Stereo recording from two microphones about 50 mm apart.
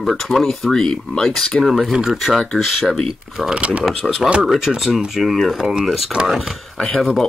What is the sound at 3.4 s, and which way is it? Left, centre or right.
Speech, right.